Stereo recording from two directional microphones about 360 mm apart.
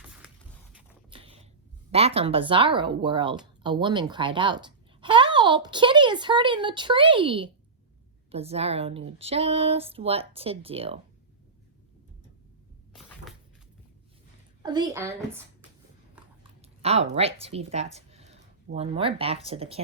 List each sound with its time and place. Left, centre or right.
0.0 s a sound: centre
1.1 s a sound: centre
1.9 s a child's voice: centre
14.6 s speech: centre
16.1 s chewing: centre
17.2 s speech: centre